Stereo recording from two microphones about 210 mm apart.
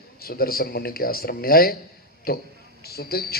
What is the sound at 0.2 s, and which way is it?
A man's voice, 45° left (ahead or behind).